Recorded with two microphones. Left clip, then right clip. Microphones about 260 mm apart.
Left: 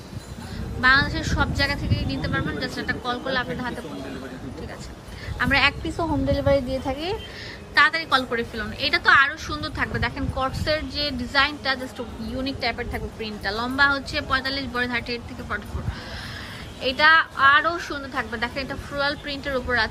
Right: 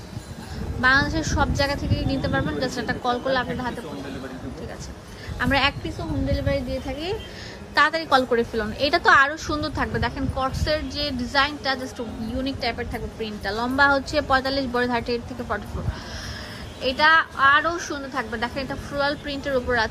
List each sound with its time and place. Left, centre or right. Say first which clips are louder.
0.8 s a woman's voice: left 1 dB; centre
5.4 s a woman's voice: left 1 dB; centre
6.0 s a woman's voice: left 4 dB; centre
7.8 s a woman's voice: even; centre
16.8 s a woman's voice: left 1 dB; centre